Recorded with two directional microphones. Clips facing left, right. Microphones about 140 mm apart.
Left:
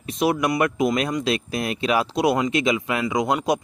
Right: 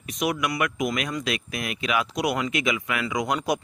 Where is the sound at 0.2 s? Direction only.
30° left (ahead or behind).